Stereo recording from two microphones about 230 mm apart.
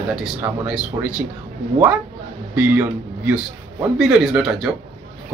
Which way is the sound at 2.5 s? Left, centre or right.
Centre.